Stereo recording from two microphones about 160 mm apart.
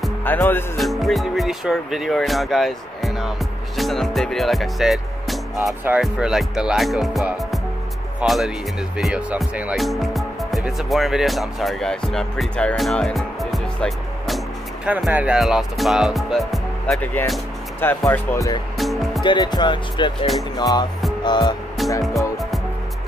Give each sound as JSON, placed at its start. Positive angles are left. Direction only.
{"t": 0.2, "sound": "speech", "side_deg": 10}
{"t": 0.7, "sound": "speech", "side_deg": 0}
{"t": 18.8, "sound": "music", "side_deg": 0}
{"t": 19.2, "sound": "speech", "side_deg": 25}
{"t": 21.2, "sound": "music", "side_deg": 30}
{"t": 22.0, "sound": "music", "side_deg": 0}